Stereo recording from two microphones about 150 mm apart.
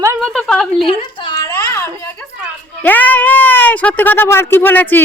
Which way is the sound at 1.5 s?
20° left (ahead or behind).